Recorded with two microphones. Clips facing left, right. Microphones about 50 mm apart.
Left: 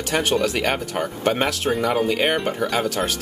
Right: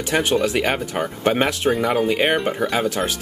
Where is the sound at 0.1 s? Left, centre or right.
Centre.